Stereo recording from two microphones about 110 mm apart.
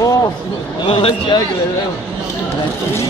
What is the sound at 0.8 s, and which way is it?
Speech, 50° left (ahead or behind).